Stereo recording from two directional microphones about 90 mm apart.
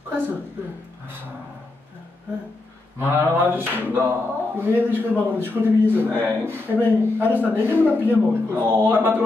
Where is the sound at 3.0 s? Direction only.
25° right (ahead or behind).